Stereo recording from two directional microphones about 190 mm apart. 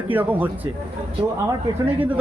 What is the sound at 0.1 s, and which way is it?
Speech, 10° right (ahead or behind).